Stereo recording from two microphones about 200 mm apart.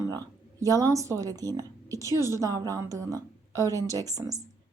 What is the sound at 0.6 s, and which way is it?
A woman's voice, 15° right (ahead or behind).